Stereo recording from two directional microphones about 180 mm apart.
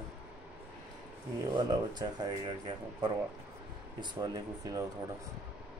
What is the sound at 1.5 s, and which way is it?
Speech, 25° right (ahead or behind).